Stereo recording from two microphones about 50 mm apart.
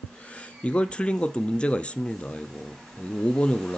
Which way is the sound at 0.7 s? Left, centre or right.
Left.